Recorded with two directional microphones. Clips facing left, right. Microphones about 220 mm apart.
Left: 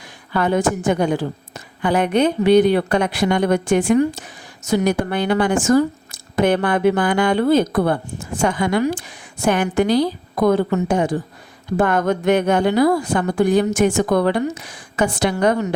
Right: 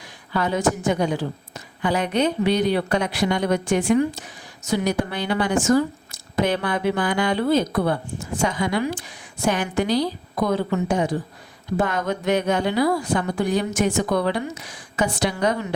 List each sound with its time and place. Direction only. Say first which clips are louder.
0.3 s a woman's voice: left 4 dB; 55° left (ahead or behind)